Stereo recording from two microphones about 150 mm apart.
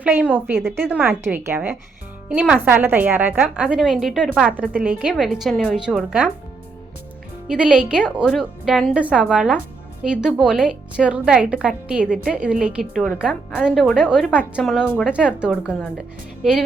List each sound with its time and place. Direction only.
0.0 s a woman's voice: 10° right (ahead or behind)
7.4 s a woman's voice: 5° right (ahead or behind)